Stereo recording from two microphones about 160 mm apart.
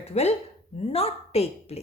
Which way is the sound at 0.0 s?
40° left (ahead or behind).